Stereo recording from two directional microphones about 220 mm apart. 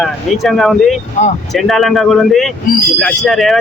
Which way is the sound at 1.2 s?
35° left (ahead or behind).